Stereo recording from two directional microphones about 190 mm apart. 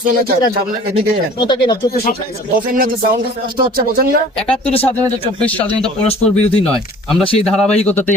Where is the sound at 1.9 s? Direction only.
55° left (ahead or behind).